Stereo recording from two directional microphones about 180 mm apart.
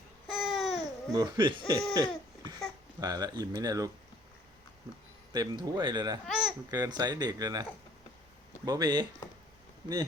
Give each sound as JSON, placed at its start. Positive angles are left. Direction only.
{"t": 0.3, "sound": "babbling", "side_deg": 0}
{"t": 1.1, "sound": "speech", "side_deg": -25}
{"t": 1.9, "sound": "a sound", "side_deg": -20}
{"t": 3.0, "sound": "speech", "side_deg": -20}
{"t": 5.3, "sound": "speech", "side_deg": -25}
{"t": 6.2, "sound": "babbling", "side_deg": -5}
{"t": 6.7, "sound": "speech", "side_deg": -20}